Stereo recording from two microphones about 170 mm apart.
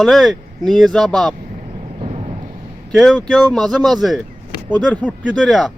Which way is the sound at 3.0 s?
Centre (ahead or behind).